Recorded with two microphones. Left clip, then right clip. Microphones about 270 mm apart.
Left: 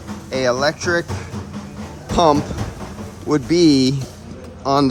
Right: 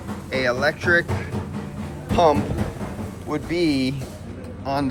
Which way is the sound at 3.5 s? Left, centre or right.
Left.